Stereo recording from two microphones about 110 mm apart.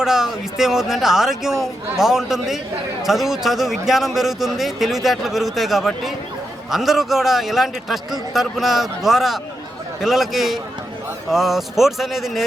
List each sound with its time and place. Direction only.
0.0 s a man's voice: 5° right (ahead or behind)